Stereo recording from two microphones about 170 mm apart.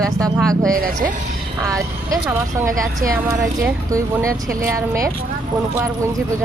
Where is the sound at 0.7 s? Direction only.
55° right (ahead or behind).